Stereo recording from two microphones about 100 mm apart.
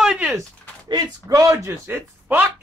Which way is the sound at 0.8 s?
40° right (ahead or behind).